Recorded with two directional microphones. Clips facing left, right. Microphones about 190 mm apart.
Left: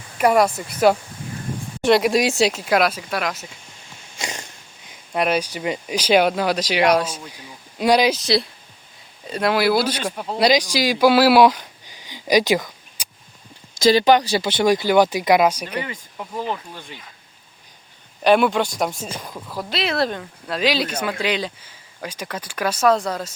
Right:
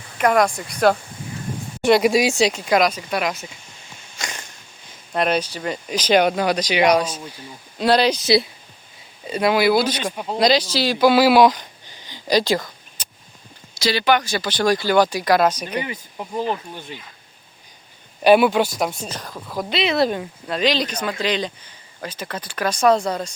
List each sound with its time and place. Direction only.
0.2 s speech: 5° left (ahead or behind)
4.2 s a sound: 30° left (ahead or behind)
5.1 s speech: 10° left (ahead or behind)
8.2 s speech: centre (ahead or behind)
10.5 s speech: 10° left (ahead or behind)
13.0 s a sound: 10° left (ahead or behind)
13.8 s speech: 40° left (ahead or behind); by 15.6 s 10° left (ahead or behind)
15.6 s speech: 25° right (ahead or behind)
18.2 s speech: 5° right (ahead or behind)